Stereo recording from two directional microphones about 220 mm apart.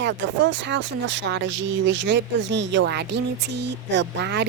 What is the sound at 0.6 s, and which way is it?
A woman's voice, 55° right (ahead or behind).